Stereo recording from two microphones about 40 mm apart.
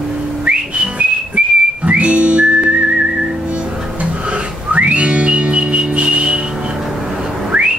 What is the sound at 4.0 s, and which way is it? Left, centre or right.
Music, right.